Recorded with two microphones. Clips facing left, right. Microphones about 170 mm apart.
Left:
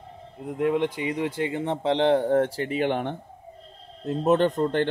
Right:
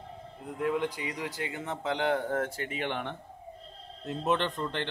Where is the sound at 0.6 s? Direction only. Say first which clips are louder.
Left 6 dB; 25° left (ahead or behind).